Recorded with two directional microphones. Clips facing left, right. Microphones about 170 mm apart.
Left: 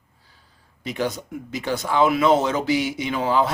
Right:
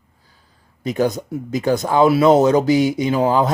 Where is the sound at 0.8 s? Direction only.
45° right (ahead or behind).